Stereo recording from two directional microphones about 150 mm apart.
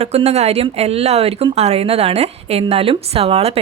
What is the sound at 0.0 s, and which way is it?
A woman's voice, 45° right (ahead or behind).